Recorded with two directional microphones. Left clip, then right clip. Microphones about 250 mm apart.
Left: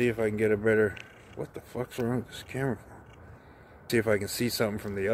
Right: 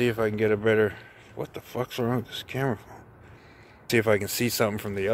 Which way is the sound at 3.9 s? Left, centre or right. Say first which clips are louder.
Right 4 dB; centre.